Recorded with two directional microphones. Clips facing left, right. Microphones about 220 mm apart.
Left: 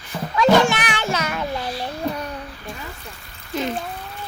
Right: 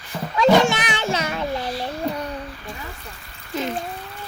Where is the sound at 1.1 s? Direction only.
25° right (ahead or behind).